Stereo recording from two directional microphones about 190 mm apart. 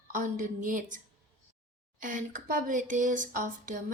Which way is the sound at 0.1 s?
40° right (ahead or behind).